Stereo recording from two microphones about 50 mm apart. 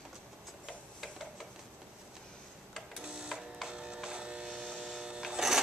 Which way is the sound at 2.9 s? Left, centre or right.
Centre.